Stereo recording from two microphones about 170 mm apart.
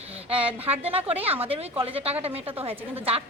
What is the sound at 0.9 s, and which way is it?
A woman's voice, 35° right (ahead or behind).